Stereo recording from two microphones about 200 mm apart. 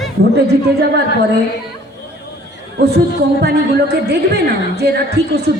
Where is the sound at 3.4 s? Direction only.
55° right (ahead or behind).